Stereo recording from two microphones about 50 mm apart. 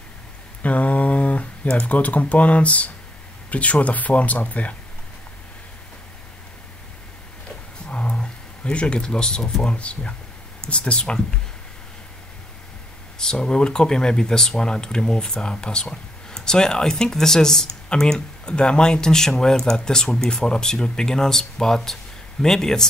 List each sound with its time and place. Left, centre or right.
0.6 s speech: left
7.9 s a sound: centre
9.7 s speech: left
13.2 s speech: centre